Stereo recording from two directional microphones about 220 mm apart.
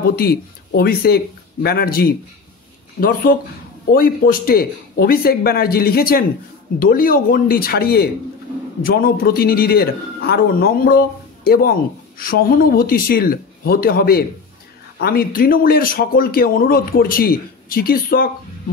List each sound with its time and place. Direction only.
0.1 s speech: 45° left (ahead or behind)